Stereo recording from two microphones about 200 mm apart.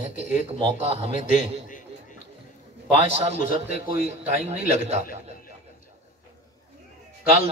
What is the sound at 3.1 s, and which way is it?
A man's voice, 35° right (ahead or behind).